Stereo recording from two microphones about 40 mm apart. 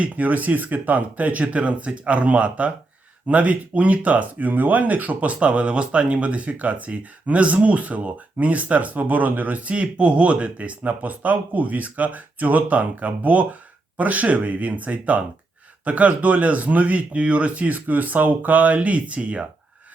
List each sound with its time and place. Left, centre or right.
0.0 s speech: right